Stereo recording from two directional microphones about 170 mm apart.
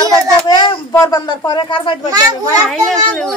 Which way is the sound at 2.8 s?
Centre (ahead or behind).